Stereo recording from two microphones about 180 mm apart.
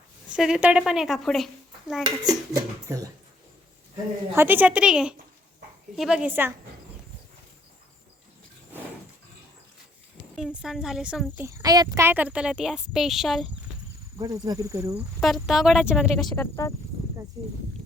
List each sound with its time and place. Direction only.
0.3 s speech: 5° right (ahead or behind)
2.2 s speech: 20° right (ahead or behind)
4.4 s speech: 10° right (ahead or behind)
10.3 s speech: centre (ahead or behind)
11.4 s speech: 20° right (ahead or behind); by 13.5 s centre (ahead or behind)
14.2 s speech: 20° right (ahead or behind)
15.2 s speech: centre (ahead or behind)
16.3 s speech: 15° left (ahead or behind)
17.4 s speech: 20° right (ahead or behind)